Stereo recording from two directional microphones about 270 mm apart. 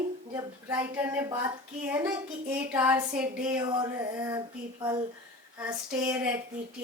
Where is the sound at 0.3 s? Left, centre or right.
Centre.